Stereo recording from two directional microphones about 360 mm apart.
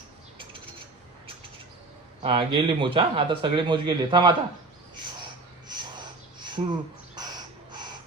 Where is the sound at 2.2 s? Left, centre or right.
Centre.